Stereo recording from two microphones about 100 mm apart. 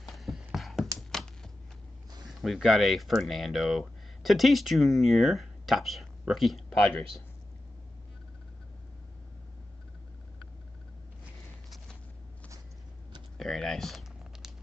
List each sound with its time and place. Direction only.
0.0 s a sound: centre (ahead or behind)
2.2 s speech: centre (ahead or behind)
6.8 s speech: 10° left (ahead or behind)
13.4 s typing: 5° left (ahead or behind)